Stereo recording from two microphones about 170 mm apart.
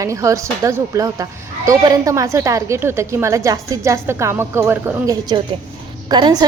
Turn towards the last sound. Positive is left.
turn(degrees=-25)  # may be behind; listen again after turning